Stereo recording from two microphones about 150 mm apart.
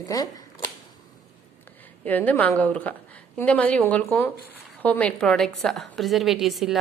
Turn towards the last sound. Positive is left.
turn(degrees=0)  # may be behind; listen again after turning